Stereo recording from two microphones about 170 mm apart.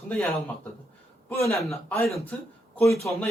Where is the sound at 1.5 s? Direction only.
Centre (ahead or behind); by 3.1 s 15° left (ahead or behind).